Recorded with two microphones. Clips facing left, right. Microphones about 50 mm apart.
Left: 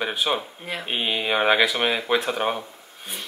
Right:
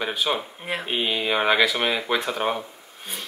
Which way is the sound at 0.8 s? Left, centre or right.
Centre.